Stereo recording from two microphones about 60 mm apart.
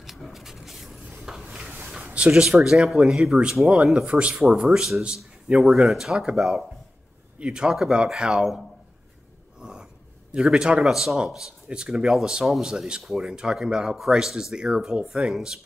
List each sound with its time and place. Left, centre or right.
0.0 s a sound: centre
2.1 s speech: centre
5.5 s speech: centre
5.9 s speech: centre
9.6 s a sound: centre
10.3 s speech: centre